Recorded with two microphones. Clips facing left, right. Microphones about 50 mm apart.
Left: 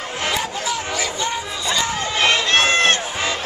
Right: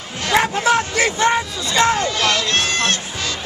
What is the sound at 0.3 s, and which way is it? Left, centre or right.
Hubbub, right.